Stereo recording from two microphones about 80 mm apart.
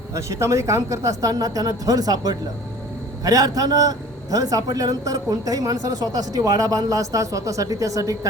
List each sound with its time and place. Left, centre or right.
0.1 s a man's voice: right